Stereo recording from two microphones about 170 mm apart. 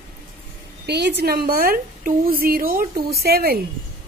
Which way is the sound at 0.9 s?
85° right.